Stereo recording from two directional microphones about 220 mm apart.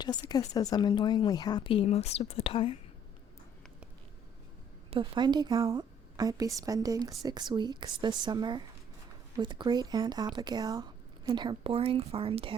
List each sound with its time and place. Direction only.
0.0 s a woman's voice: 20° left (ahead or behind)
4.9 s a woman's voice: 20° right (ahead or behind)